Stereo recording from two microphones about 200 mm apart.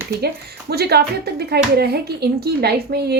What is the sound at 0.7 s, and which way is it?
Speech, 55° right (ahead or behind).